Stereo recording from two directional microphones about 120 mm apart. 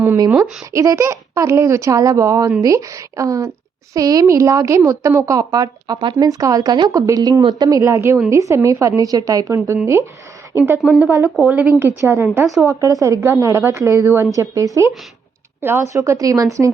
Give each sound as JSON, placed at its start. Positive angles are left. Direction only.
{"t": 0.3, "sound": "a woman's voice", "side_deg": -10}
{"t": 0.7, "sound": "a woman's voice", "side_deg": -25}
{"t": 10.9, "sound": "a woman's voice", "side_deg": -15}
{"t": 11.8, "sound": "a woman's voice", "side_deg": -20}
{"t": 12.6, "sound": "a woman's voice", "side_deg": -25}